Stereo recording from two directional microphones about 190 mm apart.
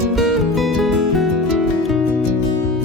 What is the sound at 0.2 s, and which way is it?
Music, centre (ahead or behind).